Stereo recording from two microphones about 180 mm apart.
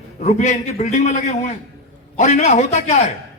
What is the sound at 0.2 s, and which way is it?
A man's voice, 40° left (ahead or behind).